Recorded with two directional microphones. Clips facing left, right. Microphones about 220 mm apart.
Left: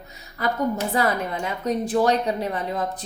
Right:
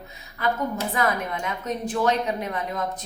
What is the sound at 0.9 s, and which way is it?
A woman's voice, 35° left (ahead or behind).